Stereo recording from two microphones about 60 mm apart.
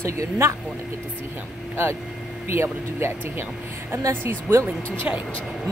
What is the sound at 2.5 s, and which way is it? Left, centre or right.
Speech, right.